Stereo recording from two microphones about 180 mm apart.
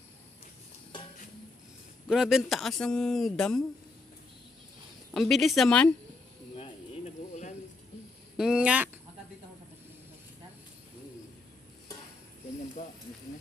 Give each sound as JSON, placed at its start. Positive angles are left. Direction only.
{"t": 2.0, "sound": "speech", "side_deg": -5}
{"t": 5.1, "sound": "speech", "side_deg": 0}
{"t": 6.6, "sound": "a sound", "side_deg": 35}
{"t": 8.4, "sound": "speech", "side_deg": -5}